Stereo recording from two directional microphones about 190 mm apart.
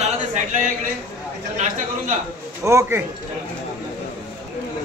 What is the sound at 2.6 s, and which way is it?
Speech, 15° right (ahead or behind).